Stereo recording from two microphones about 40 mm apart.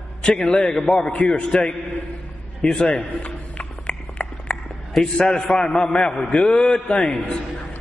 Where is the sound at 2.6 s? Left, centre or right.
Left.